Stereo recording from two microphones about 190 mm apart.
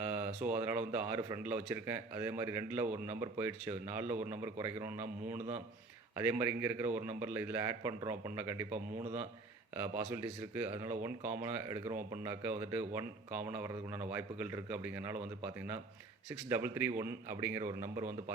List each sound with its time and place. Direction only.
0.0 s a sound: 10° right (ahead or behind)
0.4 s a man's voice: 10° right (ahead or behind)
16.5 s a man's voice: 10° right (ahead or behind)